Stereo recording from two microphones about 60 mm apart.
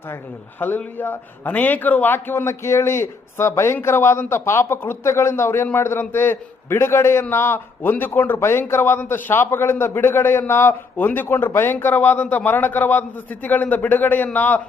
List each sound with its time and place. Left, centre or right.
0.6 s a man's voice: left
2.1 s a man's voice: left
2.5 s a man's voice: left
9.3 s a man's voice: left